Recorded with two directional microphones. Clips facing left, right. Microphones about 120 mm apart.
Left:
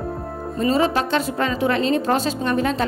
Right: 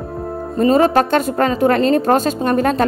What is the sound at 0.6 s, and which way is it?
A woman's voice, 50° right (ahead or behind).